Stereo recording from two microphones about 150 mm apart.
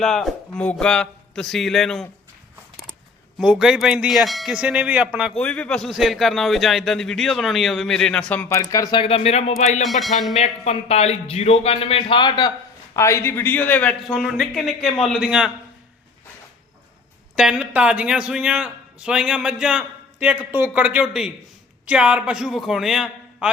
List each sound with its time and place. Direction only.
0.0 s a man's voice: centre (ahead or behind)
3.3 s a man's voice: 5° right (ahead or behind)
5.4 s a man's voice: 5° left (ahead or behind); by 9.0 s 20° left (ahead or behind)
9.0 s speech: 40° left (ahead or behind)
9.8 s a man's voice: centre (ahead or behind)
10.3 s speech: 45° left (ahead or behind)
13.0 s a man's voice: 20° left (ahead or behind); by 15.5 s 5° right (ahead or behind)
17.3 s a man's voice: 5° right (ahead or behind)